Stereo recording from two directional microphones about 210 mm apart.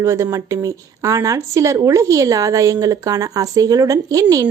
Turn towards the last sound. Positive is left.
turn(degrees=-15)  # may be behind; listen again after turning